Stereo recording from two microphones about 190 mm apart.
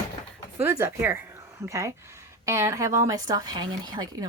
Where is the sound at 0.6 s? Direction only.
10° right (ahead or behind).